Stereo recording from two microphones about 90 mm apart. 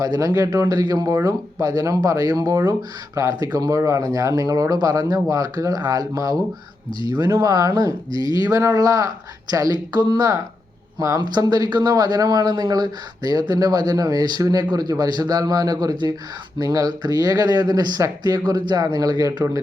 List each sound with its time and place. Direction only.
0.0 s speech: 40° right (ahead or behind)